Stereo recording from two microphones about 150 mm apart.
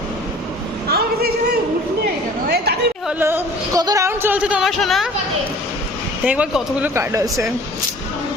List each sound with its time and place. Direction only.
0.9 s a sound: 90° right
2.5 s chatter: 90° right
3.1 s speech: 15° right (ahead or behind)
6.2 s speech: 10° right (ahead or behind)